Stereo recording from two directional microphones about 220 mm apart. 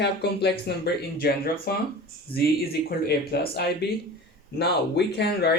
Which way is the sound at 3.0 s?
45° left (ahead or behind).